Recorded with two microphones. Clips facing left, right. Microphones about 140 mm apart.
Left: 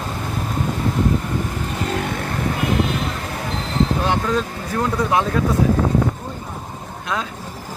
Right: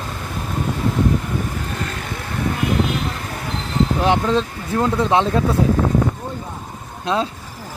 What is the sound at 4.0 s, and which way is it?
Speech, 20° right (ahead or behind).